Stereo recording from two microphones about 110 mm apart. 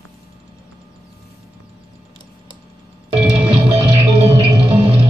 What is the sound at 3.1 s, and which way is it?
Music, 60° right (ahead or behind).